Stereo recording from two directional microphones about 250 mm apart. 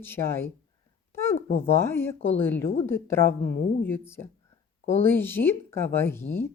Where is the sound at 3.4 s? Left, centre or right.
Left.